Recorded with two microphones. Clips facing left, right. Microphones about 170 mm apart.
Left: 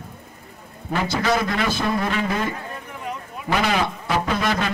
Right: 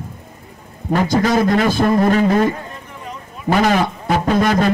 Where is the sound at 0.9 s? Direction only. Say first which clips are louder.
Right 6 dB; 45° right (ahead or behind).